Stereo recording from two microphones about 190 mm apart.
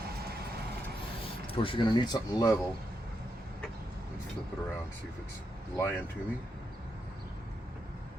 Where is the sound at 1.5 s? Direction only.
25° left (ahead or behind).